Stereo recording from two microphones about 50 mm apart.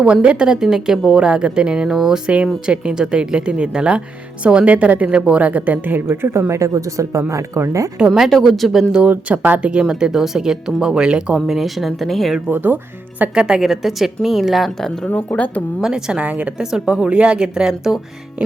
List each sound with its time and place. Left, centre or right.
0.0 s a woman's voice: right
6.1 s speech: right
6.5 s speech: right
7.9 s speech: centre
8.3 s a woman's voice: centre
8.9 s a woman's voice: right
9.6 s speech: centre
11.4 s a woman's voice: centre
12.5 s speech: right
13.3 s a woman's voice: centre
14.8 s speech: centre
15.1 s speech: left
15.8 s a woman's voice: centre